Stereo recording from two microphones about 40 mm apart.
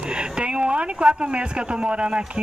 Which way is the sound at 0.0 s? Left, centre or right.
Right.